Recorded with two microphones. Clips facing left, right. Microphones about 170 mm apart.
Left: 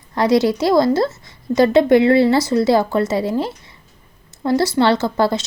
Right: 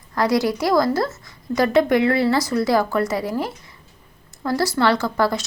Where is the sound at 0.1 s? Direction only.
25° left (ahead or behind).